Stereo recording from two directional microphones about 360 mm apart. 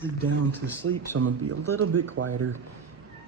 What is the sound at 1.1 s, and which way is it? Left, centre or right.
Speech, right.